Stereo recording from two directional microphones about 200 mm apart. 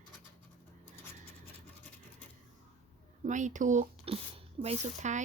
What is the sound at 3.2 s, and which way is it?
Speech, 40° right (ahead or behind).